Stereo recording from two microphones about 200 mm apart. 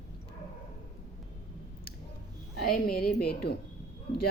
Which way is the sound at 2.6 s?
45° left (ahead or behind).